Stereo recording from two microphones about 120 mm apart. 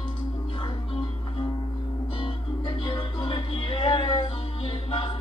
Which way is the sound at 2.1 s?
45° left (ahead or behind).